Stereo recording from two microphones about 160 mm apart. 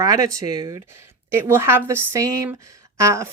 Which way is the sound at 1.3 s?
15° right (ahead or behind).